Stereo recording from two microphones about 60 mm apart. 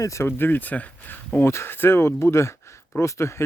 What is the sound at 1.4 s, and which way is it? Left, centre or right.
Speech, left.